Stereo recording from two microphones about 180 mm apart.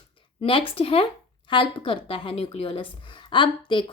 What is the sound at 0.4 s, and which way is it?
A woman's voice, 30° left (ahead or behind).